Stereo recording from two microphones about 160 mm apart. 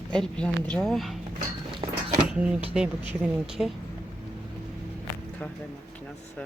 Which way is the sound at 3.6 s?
5° right (ahead or behind).